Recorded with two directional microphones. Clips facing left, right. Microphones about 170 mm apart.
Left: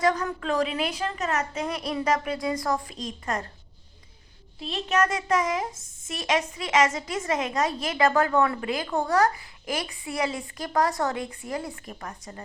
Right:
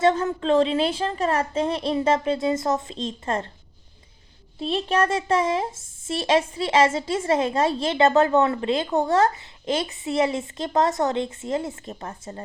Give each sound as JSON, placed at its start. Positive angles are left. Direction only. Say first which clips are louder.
{"t": 0.0, "sound": "a woman's voice", "louder": "right 4 dB", "side_deg": -25}
{"t": 4.7, "sound": "a woman's voice", "louder": "right 3 dB", "side_deg": -30}